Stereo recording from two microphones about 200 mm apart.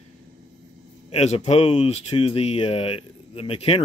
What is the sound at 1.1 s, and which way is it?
Speech, 30° left (ahead or behind).